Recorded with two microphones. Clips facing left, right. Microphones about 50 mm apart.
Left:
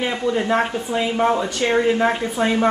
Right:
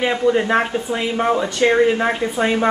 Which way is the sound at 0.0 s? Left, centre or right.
Right.